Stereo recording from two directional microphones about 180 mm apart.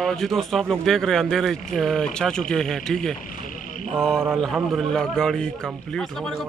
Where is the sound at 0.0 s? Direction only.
Centre (ahead or behind).